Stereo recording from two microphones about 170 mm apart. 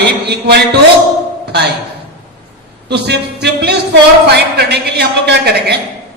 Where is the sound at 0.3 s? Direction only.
75° right (ahead or behind).